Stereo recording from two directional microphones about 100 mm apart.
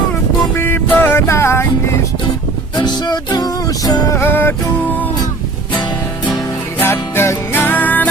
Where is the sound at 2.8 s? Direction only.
45° left (ahead or behind).